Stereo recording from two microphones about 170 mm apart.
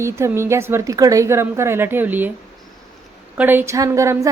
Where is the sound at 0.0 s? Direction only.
15° right (ahead or behind).